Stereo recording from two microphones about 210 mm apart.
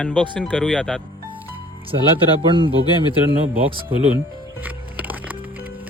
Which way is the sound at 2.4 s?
25° right (ahead or behind).